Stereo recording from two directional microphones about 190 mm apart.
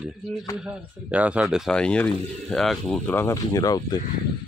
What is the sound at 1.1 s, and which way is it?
Speech, 5° right (ahead or behind).